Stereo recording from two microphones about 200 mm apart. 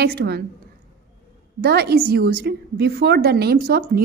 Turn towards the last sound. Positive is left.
turn(degrees=-50)  # may be behind; listen again after turning